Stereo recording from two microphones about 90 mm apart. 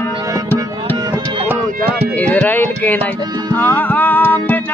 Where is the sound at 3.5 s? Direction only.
20° left (ahead or behind).